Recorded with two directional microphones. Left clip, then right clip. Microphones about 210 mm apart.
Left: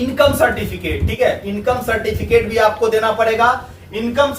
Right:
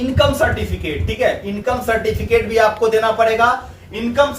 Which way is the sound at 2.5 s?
10° left (ahead or behind).